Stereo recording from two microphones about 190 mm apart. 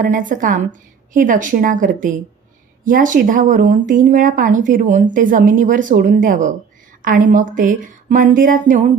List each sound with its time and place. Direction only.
0.0 s speech: 45° right (ahead or behind)